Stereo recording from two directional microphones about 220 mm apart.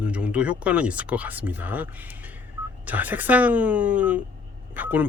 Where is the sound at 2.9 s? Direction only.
10° right (ahead or behind).